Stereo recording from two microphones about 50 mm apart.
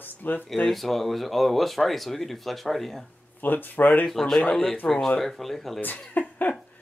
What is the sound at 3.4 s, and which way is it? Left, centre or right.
Speech, left.